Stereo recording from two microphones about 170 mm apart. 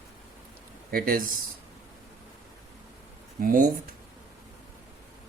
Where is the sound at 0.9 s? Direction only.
60° right (ahead or behind).